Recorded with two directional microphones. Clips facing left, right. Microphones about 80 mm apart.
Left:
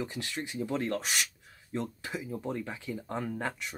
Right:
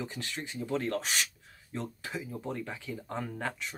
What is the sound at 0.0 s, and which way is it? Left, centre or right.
Speech, centre.